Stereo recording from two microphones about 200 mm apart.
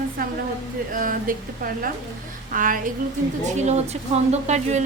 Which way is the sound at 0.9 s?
45° right (ahead or behind).